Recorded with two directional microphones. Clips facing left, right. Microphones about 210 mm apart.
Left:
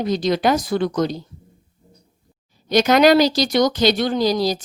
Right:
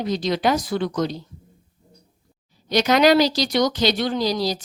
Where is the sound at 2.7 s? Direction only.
50° left (ahead or behind).